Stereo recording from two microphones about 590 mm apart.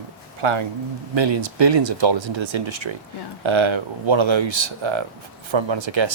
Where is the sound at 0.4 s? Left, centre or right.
Right.